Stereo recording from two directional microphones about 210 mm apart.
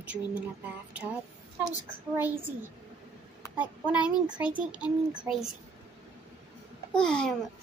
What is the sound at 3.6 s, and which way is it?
A child's voice, 5° right (ahead or behind).